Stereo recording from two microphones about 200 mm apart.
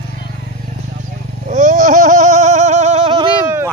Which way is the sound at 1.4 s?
40° right (ahead or behind).